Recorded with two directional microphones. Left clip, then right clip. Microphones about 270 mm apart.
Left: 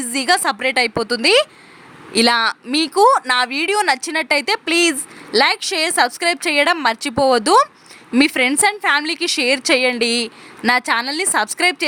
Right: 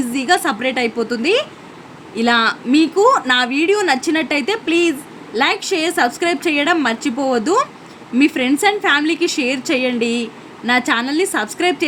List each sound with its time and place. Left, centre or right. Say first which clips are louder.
0.0 s a woman's voice: right 1 dB; left